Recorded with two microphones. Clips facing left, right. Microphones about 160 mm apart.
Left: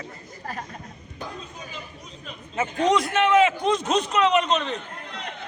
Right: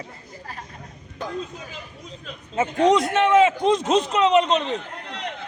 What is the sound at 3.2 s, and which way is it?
Speech, 20° right (ahead or behind).